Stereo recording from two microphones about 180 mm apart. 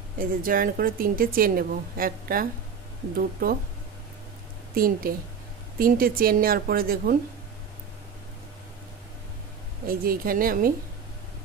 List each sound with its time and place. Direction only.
0.2 s a woman's voice: 50° right (ahead or behind)
4.7 s a woman's voice: 55° right (ahead or behind)
9.8 s a woman's voice: 55° right (ahead or behind)